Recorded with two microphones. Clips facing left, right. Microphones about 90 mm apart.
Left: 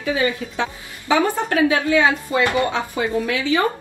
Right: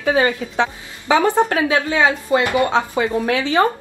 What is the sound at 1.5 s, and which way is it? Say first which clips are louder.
A woman's voice: left 1 dB; 30° right (ahead or behind).